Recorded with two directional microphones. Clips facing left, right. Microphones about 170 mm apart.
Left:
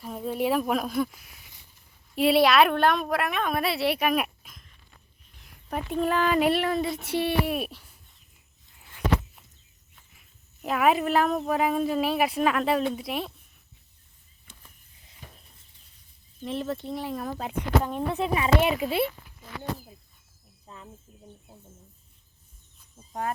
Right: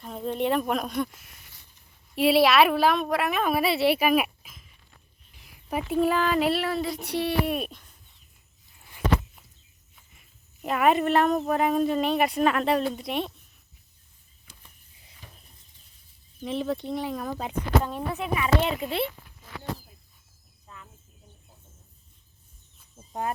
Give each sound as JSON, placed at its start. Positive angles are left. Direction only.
{"t": 0.0, "sound": "a woman's voice", "side_deg": 5}
{"t": 9.9, "sound": "speech", "side_deg": 0}
{"t": 16.4, "sound": "a woman's voice", "side_deg": 0}
{"t": 18.2, "sound": "speech", "side_deg": 30}
{"t": 18.6, "sound": "speech", "side_deg": 10}
{"t": 20.7, "sound": "cricket", "side_deg": 30}
{"t": 23.0, "sound": "a sound", "side_deg": -25}